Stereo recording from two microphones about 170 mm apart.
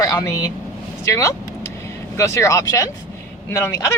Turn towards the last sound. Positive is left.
turn(degrees=20)  # may be behind; listen again after turning